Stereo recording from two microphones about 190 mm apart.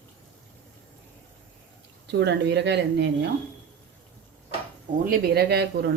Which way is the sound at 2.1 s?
65° right (ahead or behind).